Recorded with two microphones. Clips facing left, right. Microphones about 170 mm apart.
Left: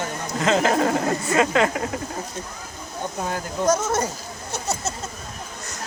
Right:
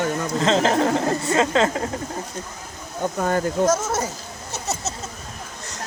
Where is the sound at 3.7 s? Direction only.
5° right (ahead or behind).